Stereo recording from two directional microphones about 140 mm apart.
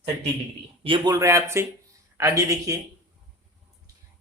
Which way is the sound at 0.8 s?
35° right (ahead or behind).